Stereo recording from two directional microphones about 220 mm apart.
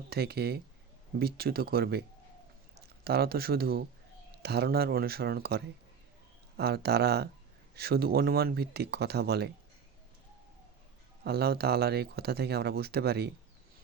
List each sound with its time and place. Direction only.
0.1 s speech: 45° right (ahead or behind)
11.2 s speech: 45° right (ahead or behind)